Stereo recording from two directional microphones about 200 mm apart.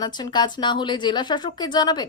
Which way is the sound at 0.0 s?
20° left (ahead or behind).